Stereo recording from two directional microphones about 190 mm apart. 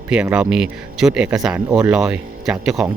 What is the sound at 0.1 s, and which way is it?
Speech, 5° right (ahead or behind).